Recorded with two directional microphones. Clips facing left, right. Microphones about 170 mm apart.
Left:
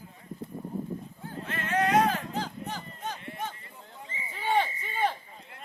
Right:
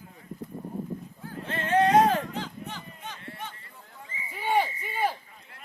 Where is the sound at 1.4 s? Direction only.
30° right (ahead or behind).